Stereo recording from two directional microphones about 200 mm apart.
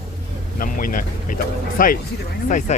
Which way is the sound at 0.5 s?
45° left (ahead or behind).